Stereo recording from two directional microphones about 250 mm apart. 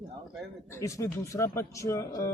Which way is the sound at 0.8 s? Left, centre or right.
Centre.